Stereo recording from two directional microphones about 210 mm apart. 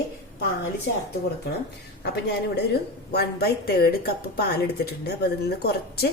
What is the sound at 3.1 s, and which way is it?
A woman's voice, 50° left (ahead or behind).